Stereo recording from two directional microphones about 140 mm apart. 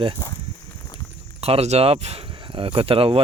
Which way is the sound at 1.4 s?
45° right (ahead or behind).